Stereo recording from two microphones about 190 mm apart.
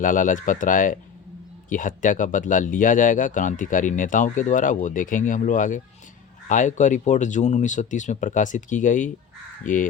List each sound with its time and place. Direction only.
0.0 s speech: 45° left (ahead or behind)